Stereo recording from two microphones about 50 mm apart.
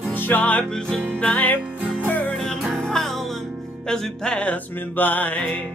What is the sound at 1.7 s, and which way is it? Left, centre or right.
Music, right.